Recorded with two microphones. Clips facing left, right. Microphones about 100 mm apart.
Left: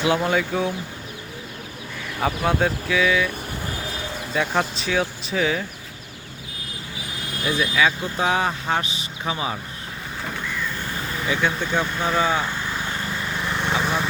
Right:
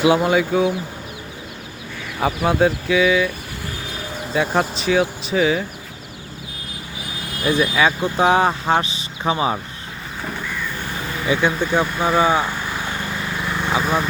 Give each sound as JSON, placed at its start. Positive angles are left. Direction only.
{"t": 0.0, "sound": "speech", "side_deg": -10}
{"t": 2.2, "sound": "speech", "side_deg": -5}
{"t": 4.4, "sound": "speech", "side_deg": -5}
{"t": 7.8, "sound": "speech", "side_deg": -40}
{"t": 11.3, "sound": "speech", "side_deg": -15}
{"t": 13.1, "sound": "vehicle", "side_deg": -5}